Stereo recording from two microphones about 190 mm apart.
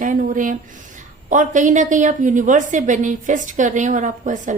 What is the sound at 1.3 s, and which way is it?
A woman's voice, 40° right (ahead or behind).